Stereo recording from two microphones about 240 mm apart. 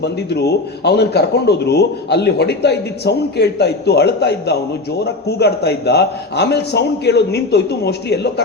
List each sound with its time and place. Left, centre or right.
0.0 s a man's voice: left